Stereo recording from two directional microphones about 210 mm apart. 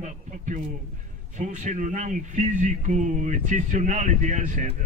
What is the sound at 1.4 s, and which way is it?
Speech, 35° right (ahead or behind).